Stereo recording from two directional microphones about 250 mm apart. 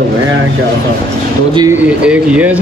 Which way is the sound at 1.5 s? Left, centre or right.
Centre.